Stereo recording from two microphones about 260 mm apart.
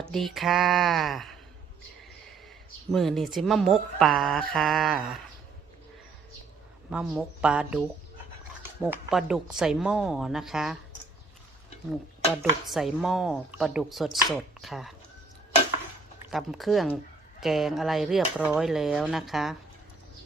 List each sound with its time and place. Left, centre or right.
0.0 s speech: centre
2.9 s speech: centre
6.9 s speech: centre
12.4 s speech: centre
16.3 s speech: centre